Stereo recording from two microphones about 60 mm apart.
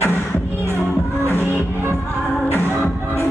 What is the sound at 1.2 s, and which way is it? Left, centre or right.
Music, left.